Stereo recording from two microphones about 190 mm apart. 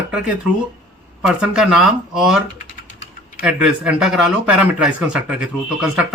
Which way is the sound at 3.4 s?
5° right (ahead or behind).